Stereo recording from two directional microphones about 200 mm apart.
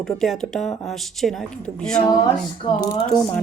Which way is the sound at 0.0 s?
Centre (ahead or behind).